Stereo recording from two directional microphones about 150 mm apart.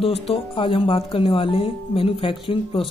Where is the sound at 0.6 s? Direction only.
35° left (ahead or behind).